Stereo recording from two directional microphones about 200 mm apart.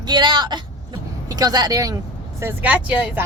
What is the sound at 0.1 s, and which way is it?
Speech, 20° right (ahead or behind).